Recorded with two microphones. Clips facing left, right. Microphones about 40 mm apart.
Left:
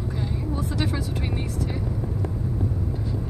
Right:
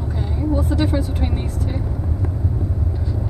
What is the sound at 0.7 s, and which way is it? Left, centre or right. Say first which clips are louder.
Vehicle: right 6 dB; right.